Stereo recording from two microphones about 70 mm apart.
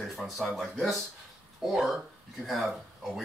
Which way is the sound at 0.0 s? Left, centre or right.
Centre.